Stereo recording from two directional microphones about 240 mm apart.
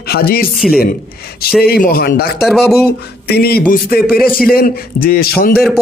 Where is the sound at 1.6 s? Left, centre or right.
Left.